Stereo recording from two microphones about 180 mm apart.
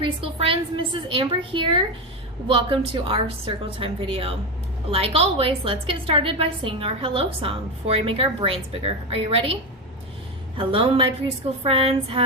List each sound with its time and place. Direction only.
0.0 s a woman's voice: 30° right (ahead or behind)
10.6 s a woman's voice: 30° right (ahead or behind)